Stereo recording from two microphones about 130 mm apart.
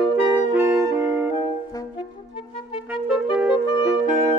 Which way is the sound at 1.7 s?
30° left (ahead or behind).